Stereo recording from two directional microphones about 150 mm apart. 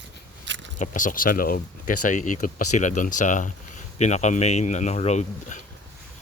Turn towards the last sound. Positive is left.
turn(degrees=50)  # may be behind; listen again after turning